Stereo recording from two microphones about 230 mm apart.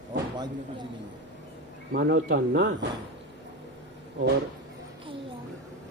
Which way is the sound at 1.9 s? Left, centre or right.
Right.